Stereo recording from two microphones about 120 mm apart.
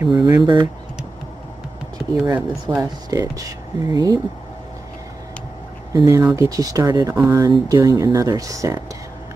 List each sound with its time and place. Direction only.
0.0 s speech: 35° right (ahead or behind)
2.1 s speech: 15° right (ahead or behind)
2.8 s speech: 30° right (ahead or behind)
5.9 s speech: 25° right (ahead or behind)